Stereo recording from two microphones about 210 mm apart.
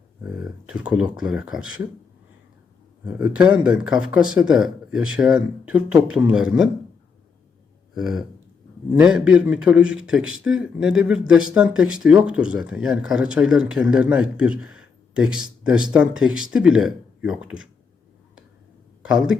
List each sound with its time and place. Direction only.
0.2 s a man's voice: 5° right (ahead or behind)
3.0 s a man's voice: 5° right (ahead or behind)
7.9 s a man's voice: centre (ahead or behind)
19.0 s a man's voice: 5° right (ahead or behind)